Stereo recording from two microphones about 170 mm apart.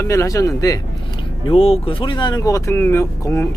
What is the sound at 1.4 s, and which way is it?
Speech, 35° left (ahead or behind).